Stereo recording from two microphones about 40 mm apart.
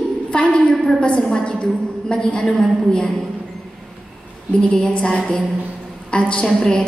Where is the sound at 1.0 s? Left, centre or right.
Left.